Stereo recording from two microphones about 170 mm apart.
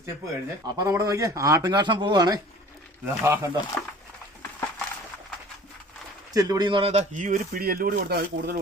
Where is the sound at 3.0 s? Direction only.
15° right (ahead or behind).